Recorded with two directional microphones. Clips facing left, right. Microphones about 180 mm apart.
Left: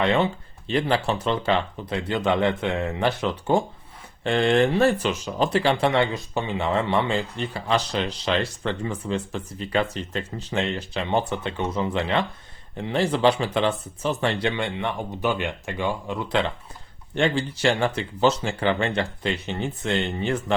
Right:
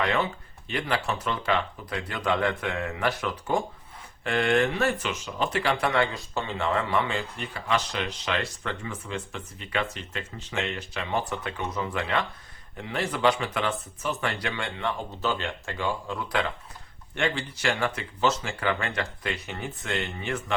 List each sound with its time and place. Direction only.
0.0 s speech: 25° left (ahead or behind)
5.8 s speech: 20° left (ahead or behind)
14.4 s speech: 20° left (ahead or behind)